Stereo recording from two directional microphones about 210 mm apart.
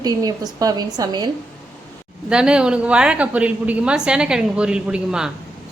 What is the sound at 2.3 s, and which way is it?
A woman's voice, 5° right (ahead or behind).